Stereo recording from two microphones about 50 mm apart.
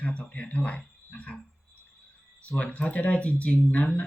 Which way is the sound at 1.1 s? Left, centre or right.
Left.